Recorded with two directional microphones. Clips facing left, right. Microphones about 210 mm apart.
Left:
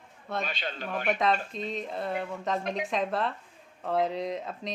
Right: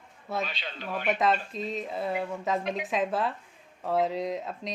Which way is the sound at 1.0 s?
Centre (ahead or behind).